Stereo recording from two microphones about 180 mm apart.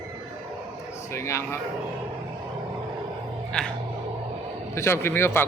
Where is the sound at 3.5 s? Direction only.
5° left (ahead or behind).